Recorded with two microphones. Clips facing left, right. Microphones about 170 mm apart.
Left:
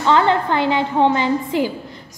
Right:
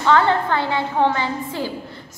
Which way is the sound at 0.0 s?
15° left (ahead or behind).